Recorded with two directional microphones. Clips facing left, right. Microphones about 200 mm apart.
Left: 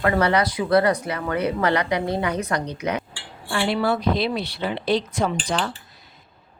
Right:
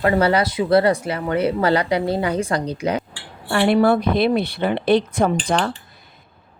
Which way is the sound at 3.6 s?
50° right (ahead or behind).